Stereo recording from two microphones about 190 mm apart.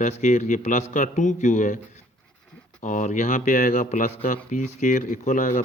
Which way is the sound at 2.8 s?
40° left (ahead or behind).